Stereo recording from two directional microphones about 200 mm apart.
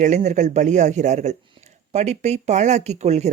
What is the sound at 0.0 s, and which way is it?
Speech, 35° right (ahead or behind).